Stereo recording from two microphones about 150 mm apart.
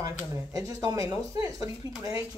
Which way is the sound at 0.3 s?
20° right (ahead or behind).